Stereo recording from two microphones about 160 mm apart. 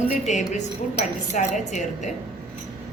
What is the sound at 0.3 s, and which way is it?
A woman's voice, 50° left (ahead or behind).